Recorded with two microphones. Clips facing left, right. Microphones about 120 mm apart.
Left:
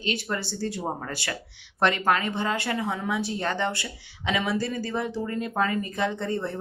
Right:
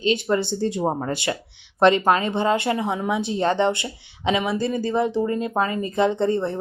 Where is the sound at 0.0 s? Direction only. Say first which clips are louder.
Right 9 dB; 20° right (ahead or behind).